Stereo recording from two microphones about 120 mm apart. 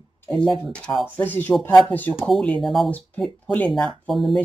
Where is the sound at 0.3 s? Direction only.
Centre (ahead or behind).